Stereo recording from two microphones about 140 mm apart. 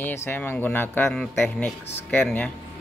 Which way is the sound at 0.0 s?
15° left (ahead or behind).